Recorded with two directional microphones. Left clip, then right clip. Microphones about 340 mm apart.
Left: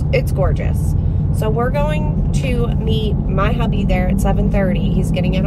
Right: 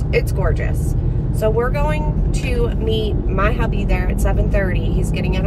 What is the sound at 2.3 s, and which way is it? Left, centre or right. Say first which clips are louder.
Speech: even; left.